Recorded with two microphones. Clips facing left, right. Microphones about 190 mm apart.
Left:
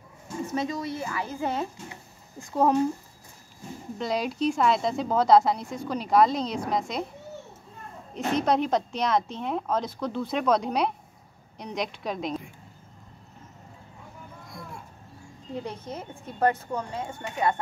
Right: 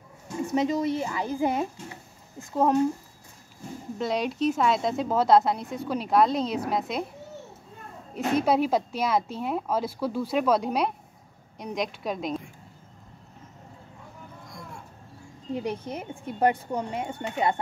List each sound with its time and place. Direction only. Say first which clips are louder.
0.6 s speech: right 6 dB; 20° right (ahead or behind)
2.3 s a woman's voice: even; centre (ahead or behind)
4.0 s a woman's voice: right 1 dB; centre (ahead or behind)
8.1 s a woman's voice: right 1 dB; 5° right (ahead or behind)
15.5 s speech: right 4 dB; 10° right (ahead or behind)